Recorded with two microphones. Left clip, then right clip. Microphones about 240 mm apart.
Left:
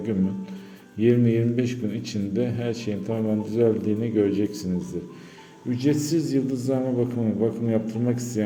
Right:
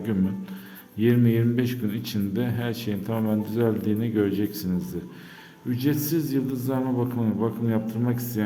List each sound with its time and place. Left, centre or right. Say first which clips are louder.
0.9 s a man's voice: left 2 dB; centre